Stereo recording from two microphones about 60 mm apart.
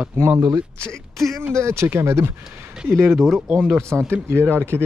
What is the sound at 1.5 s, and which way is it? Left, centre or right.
Speech, right.